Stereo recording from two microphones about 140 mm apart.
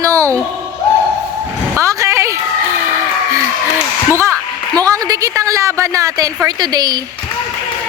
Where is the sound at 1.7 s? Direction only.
20° right (ahead or behind).